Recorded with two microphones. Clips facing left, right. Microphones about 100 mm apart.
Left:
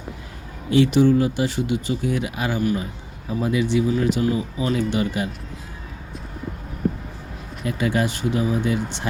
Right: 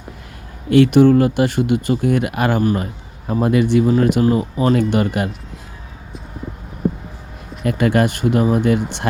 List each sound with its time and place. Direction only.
0.7 s speech: 60° right (ahead or behind)
7.6 s speech: 60° right (ahead or behind)